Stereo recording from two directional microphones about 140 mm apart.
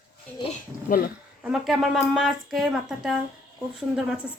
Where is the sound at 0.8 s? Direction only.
90° left.